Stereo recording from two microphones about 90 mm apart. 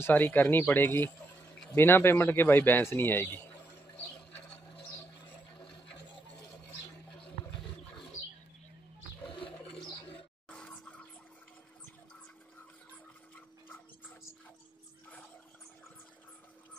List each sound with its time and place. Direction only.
0.0 s a man's voice: 20° left (ahead or behind)
9.2 s toilet flush: 70° left (ahead or behind)
10.5 s vehicle: 10° left (ahead or behind)